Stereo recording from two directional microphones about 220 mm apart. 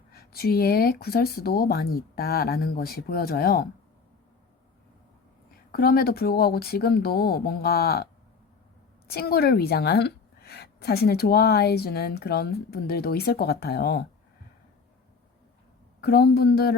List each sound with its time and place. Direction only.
0.1 s a woman's voice: 45° left (ahead or behind)
5.7 s a woman's voice: 40° left (ahead or behind)
9.0 s a woman's voice: 45° left (ahead or behind)
16.0 s a woman's voice: 45° left (ahead or behind)